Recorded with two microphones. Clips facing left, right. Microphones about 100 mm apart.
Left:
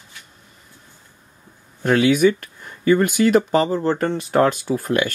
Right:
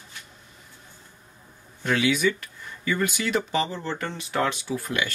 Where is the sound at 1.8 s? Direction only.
50° left (ahead or behind).